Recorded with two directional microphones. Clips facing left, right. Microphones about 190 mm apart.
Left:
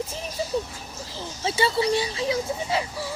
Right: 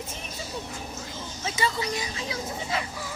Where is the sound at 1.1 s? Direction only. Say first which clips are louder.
Left 9 dB; 30° left (ahead or behind).